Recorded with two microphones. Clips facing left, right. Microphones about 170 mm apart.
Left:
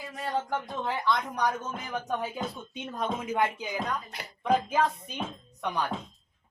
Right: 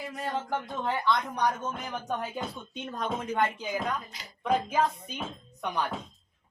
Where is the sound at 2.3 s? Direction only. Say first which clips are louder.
Left 1 dB; 5° left (ahead or behind).